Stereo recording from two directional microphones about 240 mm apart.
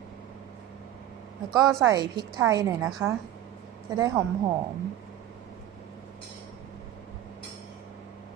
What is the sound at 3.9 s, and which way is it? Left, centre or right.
Speech, centre.